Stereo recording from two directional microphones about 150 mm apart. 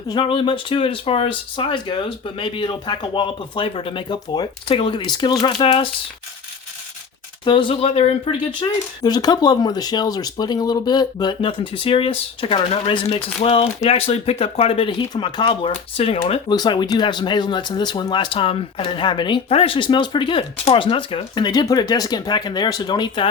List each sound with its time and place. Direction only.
0.1 s speech: 35° left (ahead or behind)
7.4 s speech: 35° left (ahead or behind)